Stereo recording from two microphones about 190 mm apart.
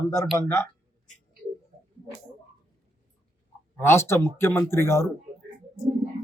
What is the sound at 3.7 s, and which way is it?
Speech, 15° left (ahead or behind).